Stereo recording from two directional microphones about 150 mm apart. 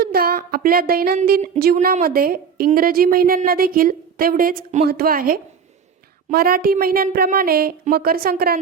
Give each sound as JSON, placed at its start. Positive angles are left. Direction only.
{"t": 0.0, "sound": "a woman's voice", "side_deg": -90}
{"t": 4.9, "sound": "a woman's voice", "side_deg": -80}